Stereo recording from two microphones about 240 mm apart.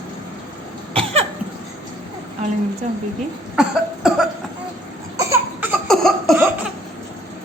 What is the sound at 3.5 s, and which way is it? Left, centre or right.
Cough, centre.